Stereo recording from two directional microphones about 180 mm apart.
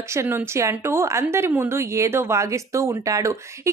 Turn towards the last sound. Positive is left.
turn(degrees=-15)  # may be behind; listen again after turning